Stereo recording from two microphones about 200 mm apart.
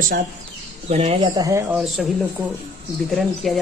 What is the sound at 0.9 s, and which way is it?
Speech, 30° right (ahead or behind).